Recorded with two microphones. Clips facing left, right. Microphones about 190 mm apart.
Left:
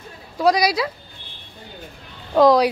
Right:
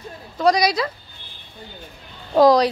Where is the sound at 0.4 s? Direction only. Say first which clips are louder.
Even; 5° left (ahead or behind).